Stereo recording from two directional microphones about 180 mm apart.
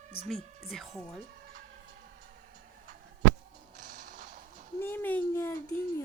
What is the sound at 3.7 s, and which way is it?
Music, 45° right (ahead or behind).